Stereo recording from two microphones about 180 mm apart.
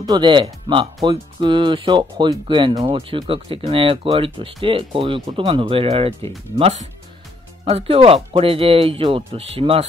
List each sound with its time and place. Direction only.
0.0 s speech: 25° right (ahead or behind)